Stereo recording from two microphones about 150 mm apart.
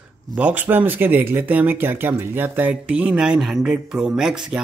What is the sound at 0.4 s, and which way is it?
Speech, 10° right (ahead or behind).